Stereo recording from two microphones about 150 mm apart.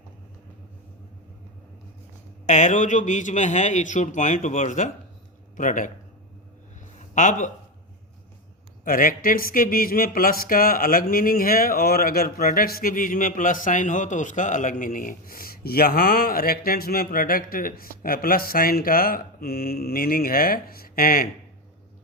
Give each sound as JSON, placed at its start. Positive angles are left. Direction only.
{"t": 2.5, "sound": "a man's voice", "side_deg": 55}
{"t": 7.1, "sound": "speech", "side_deg": 55}
{"t": 8.8, "sound": "speech", "side_deg": 70}